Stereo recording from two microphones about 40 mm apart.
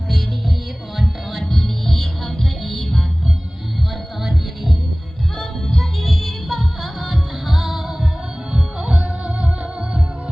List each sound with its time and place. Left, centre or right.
0.9 s music: centre
4.2 s music: centre
5.4 s music: centre
8.5 s music: right